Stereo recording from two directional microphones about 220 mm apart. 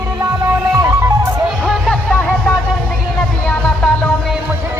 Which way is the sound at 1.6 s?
Centre (ahead or behind).